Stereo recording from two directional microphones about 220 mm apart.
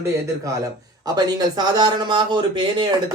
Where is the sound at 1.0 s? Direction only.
20° right (ahead or behind).